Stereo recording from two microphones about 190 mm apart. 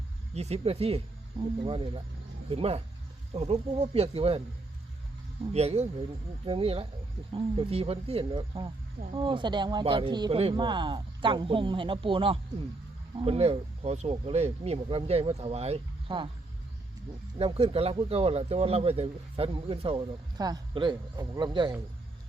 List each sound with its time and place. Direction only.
0.3 s speech: 35° right (ahead or behind)
5.5 s speech: 35° right (ahead or behind)
17.3 s speech: 30° right (ahead or behind)